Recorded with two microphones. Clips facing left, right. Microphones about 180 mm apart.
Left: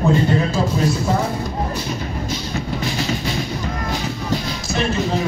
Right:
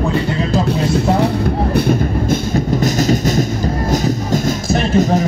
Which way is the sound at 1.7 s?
55° right (ahead or behind).